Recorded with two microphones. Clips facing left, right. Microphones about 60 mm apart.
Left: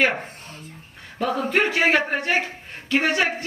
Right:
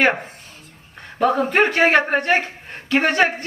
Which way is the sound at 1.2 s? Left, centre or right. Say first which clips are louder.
Right 5 dB; right.